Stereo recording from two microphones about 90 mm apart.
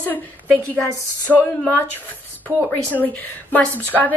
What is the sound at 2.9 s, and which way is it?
Speech, 20° left (ahead or behind).